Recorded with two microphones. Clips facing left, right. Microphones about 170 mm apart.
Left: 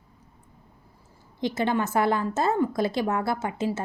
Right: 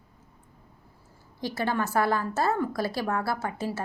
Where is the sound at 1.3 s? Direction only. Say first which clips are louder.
Left 3 dB; 20° left (ahead or behind).